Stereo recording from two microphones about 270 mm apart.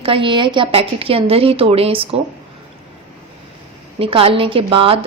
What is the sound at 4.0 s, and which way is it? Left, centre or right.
Speech, centre.